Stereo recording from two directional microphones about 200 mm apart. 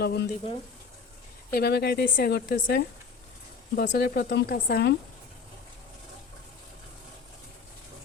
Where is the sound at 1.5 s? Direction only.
55° left (ahead or behind).